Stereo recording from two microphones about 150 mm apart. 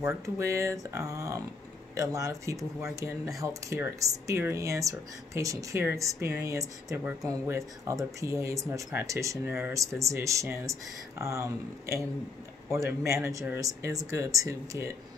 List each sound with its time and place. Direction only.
0.0 s speech: 20° right (ahead or behind)